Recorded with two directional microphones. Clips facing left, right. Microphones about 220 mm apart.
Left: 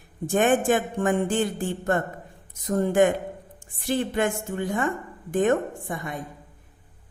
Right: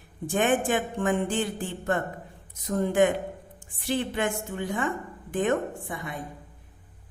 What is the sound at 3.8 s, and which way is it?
A woman's voice, 45° left (ahead or behind).